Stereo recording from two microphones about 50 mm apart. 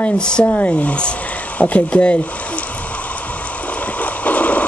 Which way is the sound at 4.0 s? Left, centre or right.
Left.